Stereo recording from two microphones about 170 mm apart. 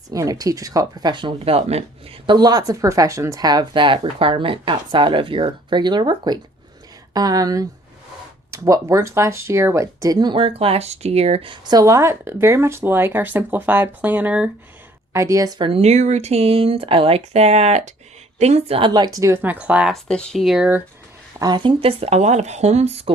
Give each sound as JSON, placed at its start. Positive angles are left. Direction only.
{"t": 0.1, "sound": "speech", "side_deg": -20}
{"t": 2.2, "sound": "speech", "side_deg": -25}
{"t": 11.7, "sound": "speech", "side_deg": -20}
{"t": 21.3, "sound": "speech", "side_deg": -25}